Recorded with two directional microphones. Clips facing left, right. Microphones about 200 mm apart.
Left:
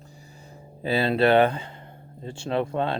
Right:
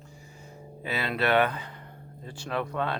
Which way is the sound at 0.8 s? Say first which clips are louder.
Left 7 dB; 30° left (ahead or behind).